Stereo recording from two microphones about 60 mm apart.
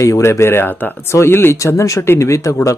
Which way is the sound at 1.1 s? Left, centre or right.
Left.